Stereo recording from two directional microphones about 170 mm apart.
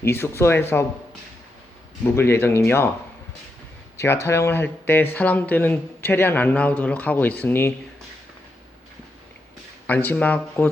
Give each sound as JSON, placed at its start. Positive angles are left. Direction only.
{"t": 0.0, "sound": "a man's voice", "side_deg": 15}
{"t": 2.1, "sound": "a man's voice", "side_deg": 15}
{"t": 3.9, "sound": "a man's voice", "side_deg": 15}
{"t": 9.8, "sound": "a man's voice", "side_deg": 10}